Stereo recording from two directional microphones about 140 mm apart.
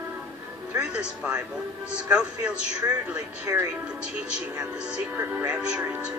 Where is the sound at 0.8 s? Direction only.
5° right (ahead or behind).